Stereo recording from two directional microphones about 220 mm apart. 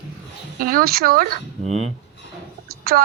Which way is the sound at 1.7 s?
30° left (ahead or behind).